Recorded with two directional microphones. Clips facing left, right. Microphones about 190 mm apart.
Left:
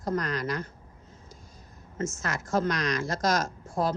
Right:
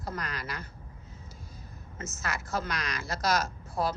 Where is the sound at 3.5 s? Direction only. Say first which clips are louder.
Left 3 dB; 45° left (ahead or behind).